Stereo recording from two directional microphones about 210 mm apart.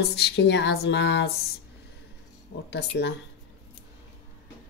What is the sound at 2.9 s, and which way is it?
Speech, 55° left (ahead or behind).